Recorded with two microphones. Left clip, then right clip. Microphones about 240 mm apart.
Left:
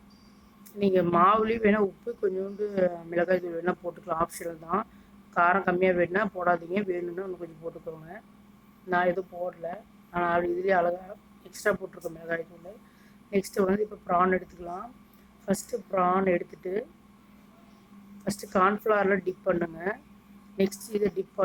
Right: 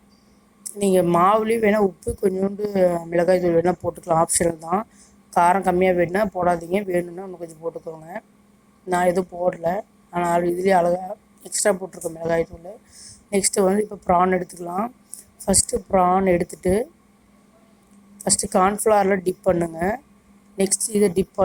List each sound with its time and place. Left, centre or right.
0.8 s a woman's voice: right
8.9 s a woman's voice: right
18.2 s a woman's voice: right